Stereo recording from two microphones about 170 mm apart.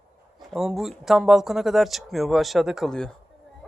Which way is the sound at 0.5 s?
Centre (ahead or behind).